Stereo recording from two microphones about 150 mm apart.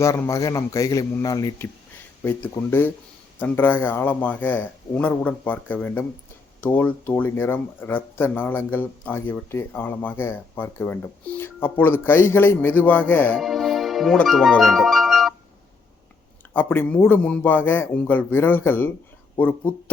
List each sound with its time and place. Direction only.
0.0 s a man's voice: 20° left (ahead or behind)
2.2 s speech: 15° left (ahead or behind)
13.3 s music: centre (ahead or behind)
16.6 s speech: 15° left (ahead or behind)